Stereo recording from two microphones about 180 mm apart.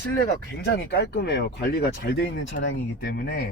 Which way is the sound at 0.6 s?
65° left (ahead or behind).